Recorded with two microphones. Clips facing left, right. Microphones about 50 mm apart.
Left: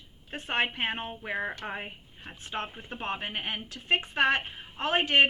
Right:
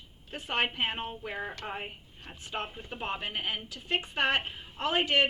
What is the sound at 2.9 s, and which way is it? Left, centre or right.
Speech, left.